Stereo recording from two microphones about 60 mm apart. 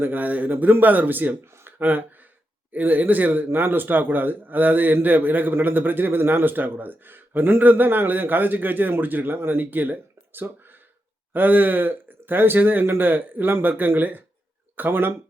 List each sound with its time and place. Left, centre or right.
0.0 s a man's voice: right